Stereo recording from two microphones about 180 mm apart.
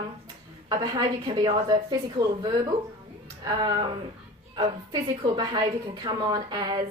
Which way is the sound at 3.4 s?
25° right (ahead or behind).